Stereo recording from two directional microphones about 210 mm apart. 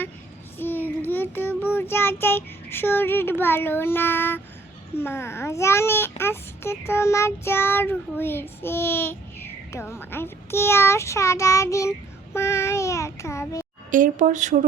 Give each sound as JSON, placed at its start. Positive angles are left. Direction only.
{"t": 0.6, "sound": "child singing", "side_deg": 10}
{"t": 4.9, "sound": "a child's voice", "side_deg": 10}
{"t": 13.9, "sound": "speech", "side_deg": -40}